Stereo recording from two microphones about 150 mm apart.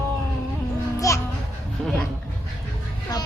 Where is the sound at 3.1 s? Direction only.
25° left (ahead or behind).